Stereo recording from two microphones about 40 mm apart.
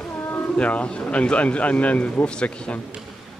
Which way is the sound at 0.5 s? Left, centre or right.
Left.